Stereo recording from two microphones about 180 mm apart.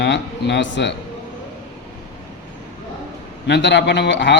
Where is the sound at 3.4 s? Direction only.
75° left (ahead or behind).